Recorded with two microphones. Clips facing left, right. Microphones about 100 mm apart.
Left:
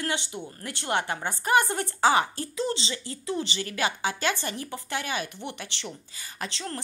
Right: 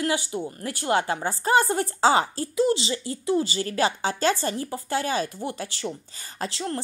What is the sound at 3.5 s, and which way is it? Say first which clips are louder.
Speech: right 5 dB; 35° right (ahead or behind).